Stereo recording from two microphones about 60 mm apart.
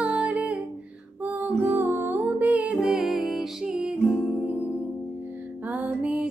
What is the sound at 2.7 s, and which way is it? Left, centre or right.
Humming, centre.